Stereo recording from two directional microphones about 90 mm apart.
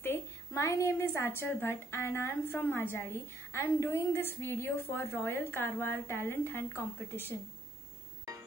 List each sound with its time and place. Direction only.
0.0 s a woman's voice: 30° left (ahead or behind)